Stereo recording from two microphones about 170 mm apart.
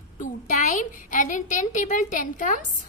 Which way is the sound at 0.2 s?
50° left (ahead or behind).